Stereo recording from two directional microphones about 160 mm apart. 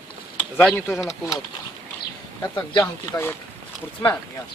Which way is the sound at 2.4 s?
25° left (ahead or behind).